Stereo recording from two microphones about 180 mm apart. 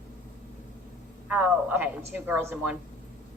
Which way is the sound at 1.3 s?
10° right (ahead or behind).